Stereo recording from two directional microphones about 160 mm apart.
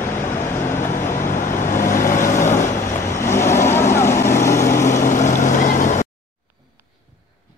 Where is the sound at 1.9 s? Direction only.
15° left (ahead or behind).